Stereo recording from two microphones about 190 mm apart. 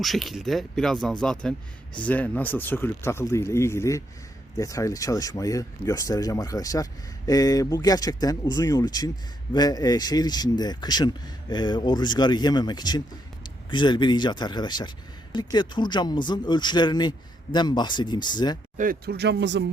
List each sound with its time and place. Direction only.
0.0 s speech: centre (ahead or behind); by 18.5 s 25° left (ahead or behind)
18.8 s speech: 50° right (ahead or behind); by 19.6 s 70° right (ahead or behind)